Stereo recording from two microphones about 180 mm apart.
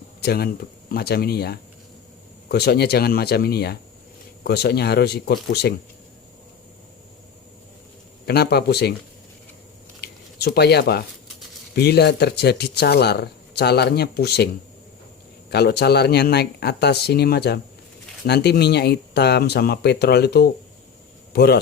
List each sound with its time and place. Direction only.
0.2 s speech: 60° left (ahead or behind)
8.3 s speech: 60° left (ahead or behind)
10.0 s squish: 60° left (ahead or behind)
11.7 s speech: 65° left (ahead or behind)